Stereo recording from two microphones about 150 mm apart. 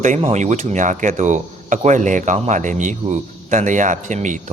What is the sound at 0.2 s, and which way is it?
Speech, 50° right (ahead or behind).